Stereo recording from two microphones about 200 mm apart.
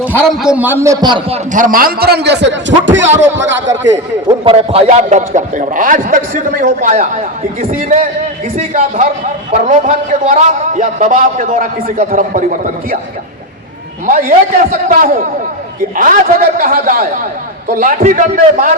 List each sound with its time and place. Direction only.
0.1 s a man's voice: 5° left (ahead or behind); by 1.4 s 25° right (ahead or behind)
1.5 s a man's voice: 45° right (ahead or behind); by 3.1 s 65° right (ahead or behind)
4.3 s a man's voice: 30° right (ahead or behind)
14.1 s a man's voice: 45° right (ahead or behind)